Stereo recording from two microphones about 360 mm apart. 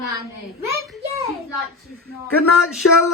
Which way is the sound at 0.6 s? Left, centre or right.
Centre.